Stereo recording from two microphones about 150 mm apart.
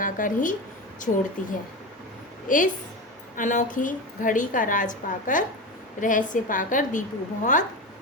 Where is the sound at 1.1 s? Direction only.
70° left (ahead or behind).